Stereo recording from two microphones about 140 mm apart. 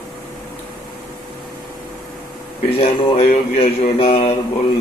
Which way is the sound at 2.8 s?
40° left (ahead or behind).